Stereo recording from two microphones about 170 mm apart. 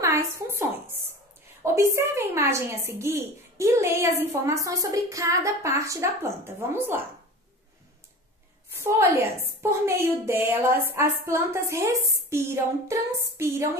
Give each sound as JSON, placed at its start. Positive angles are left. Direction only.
{"t": 0.0, "sound": "a sound", "side_deg": -15}
{"t": 1.6, "sound": "a woman's voice", "side_deg": -15}
{"t": 8.7, "sound": "a woman's voice", "side_deg": -15}